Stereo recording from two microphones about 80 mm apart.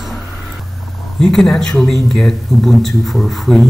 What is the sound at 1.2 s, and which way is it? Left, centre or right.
Speech, centre.